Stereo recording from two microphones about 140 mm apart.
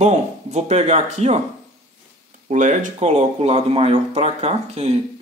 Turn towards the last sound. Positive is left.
turn(degrees=-50)  # may be behind; listen again after turning